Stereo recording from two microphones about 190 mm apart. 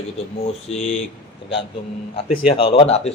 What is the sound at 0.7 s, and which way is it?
Speech, 35° left (ahead or behind).